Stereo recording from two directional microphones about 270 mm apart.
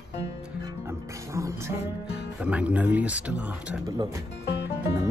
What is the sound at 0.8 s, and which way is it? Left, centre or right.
Music, centre.